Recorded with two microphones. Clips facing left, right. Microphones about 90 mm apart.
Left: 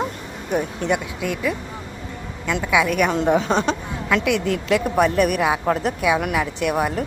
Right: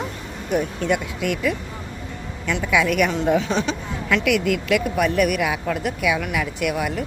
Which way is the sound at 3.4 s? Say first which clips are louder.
Left 2 dB; 40° left (ahead or behind).